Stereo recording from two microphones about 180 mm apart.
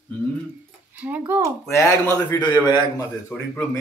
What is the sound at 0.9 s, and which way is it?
Speech, 10° right (ahead or behind).